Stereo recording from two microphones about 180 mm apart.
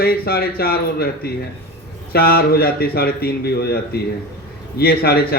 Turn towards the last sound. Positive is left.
turn(degrees=60)  # may be behind; listen again after turning